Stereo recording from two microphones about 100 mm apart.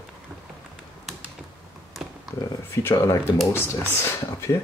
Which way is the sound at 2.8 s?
25° left (ahead or behind).